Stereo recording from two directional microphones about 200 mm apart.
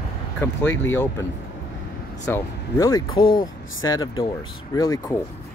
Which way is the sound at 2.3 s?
15° left (ahead or behind).